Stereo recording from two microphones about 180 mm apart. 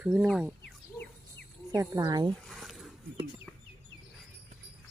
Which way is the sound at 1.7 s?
20° right (ahead or behind).